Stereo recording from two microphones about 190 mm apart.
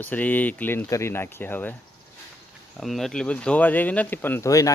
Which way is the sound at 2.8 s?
Centre (ahead or behind).